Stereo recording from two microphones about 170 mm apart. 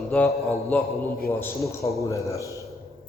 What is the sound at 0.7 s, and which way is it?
A man's voice, 10° left (ahead or behind).